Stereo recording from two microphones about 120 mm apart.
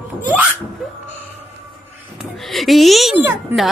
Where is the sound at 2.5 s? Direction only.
Centre (ahead or behind).